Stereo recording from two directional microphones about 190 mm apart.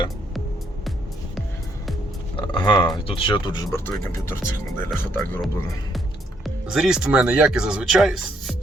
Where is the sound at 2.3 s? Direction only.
25° left (ahead or behind).